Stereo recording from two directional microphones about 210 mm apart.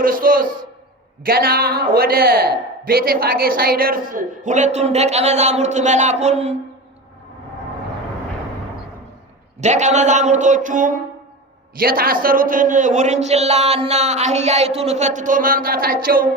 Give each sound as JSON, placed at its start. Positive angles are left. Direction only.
{"t": 0.0, "sound": "a man's voice", "side_deg": -45}
{"t": 9.6, "sound": "speech", "side_deg": -35}